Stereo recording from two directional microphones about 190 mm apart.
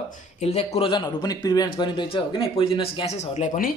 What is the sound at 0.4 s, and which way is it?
A man's voice, 35° left (ahead or behind).